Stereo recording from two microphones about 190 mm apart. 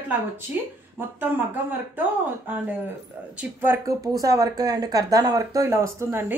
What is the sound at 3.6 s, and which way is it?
Speech, 15° right (ahead or behind).